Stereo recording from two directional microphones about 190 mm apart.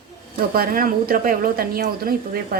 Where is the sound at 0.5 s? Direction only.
50° right (ahead or behind).